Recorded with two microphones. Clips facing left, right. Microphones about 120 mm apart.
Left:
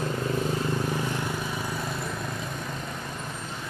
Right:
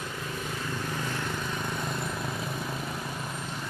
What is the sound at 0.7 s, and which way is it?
Vehicle, 15° left (ahead or behind).